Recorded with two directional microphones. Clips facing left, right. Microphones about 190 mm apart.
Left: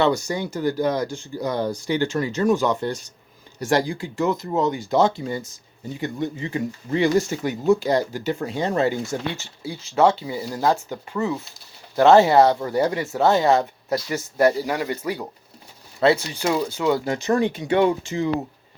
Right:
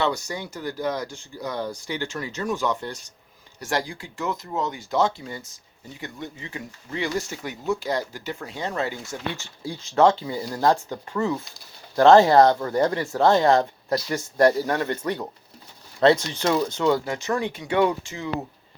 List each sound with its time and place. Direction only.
0.0 s speech: 30° left (ahead or behind)
9.6 s speech: 5° left (ahead or behind)
17.2 s speech: 35° left (ahead or behind)
17.7 s speech: 25° left (ahead or behind)